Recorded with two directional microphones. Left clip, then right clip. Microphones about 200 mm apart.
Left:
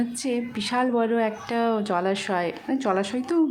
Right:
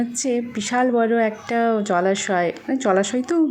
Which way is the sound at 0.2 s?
10° right (ahead or behind).